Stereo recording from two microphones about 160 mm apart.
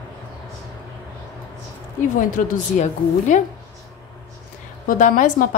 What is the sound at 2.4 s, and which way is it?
A woman's voice, 50° left (ahead or behind).